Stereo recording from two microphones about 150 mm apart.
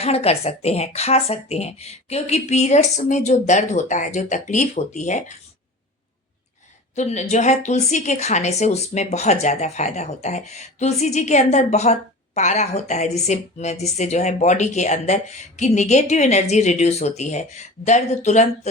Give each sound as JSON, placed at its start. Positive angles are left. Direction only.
{"t": 0.0, "sound": "a woman's voice", "side_deg": 45}
{"t": 6.9, "sound": "a woman's voice", "side_deg": 50}